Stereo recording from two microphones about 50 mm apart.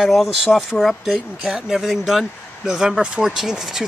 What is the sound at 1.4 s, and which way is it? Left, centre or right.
Speech, right.